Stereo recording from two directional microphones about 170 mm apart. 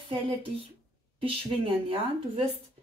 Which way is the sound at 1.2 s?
35° right (ahead or behind).